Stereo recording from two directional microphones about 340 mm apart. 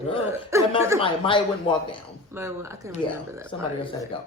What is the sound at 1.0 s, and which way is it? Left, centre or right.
Speech, centre.